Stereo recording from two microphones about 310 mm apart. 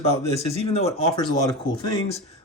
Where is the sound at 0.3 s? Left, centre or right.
Centre.